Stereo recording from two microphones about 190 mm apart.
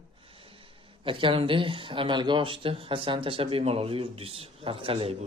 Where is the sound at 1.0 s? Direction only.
25° right (ahead or behind).